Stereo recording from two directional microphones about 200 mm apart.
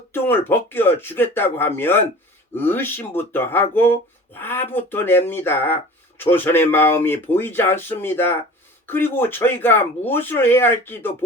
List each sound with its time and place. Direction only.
0.1 s speech: 10° left (ahead or behind)